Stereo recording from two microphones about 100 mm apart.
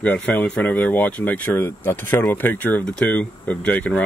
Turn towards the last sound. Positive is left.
turn(degrees=15)  # may be behind; listen again after turning